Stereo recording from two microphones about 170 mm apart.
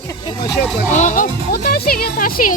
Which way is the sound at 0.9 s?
45° left (ahead or behind).